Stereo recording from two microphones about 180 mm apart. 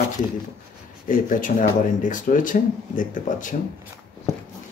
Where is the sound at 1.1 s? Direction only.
50° left (ahead or behind).